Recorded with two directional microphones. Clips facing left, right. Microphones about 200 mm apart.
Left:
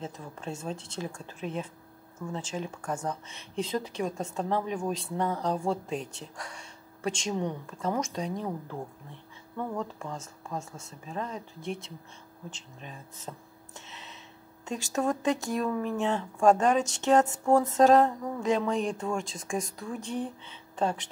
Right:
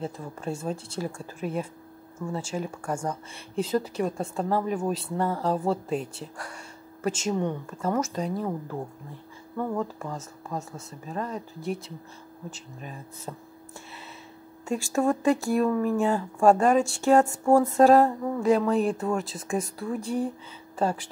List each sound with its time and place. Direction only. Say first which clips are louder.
0.0 s speech: right 5 dB; 10° right (ahead or behind)
9.8 s speech: right 4 dB; 5° right (ahead or behind)
14.7 s speech: right 4 dB; 10° right (ahead or behind)